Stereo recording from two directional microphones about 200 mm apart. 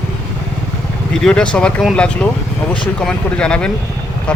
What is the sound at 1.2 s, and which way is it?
Speech, 5° left (ahead or behind).